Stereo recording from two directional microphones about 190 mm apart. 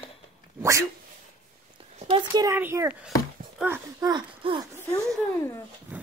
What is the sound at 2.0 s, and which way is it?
A child's voice, 25° right (ahead or behind).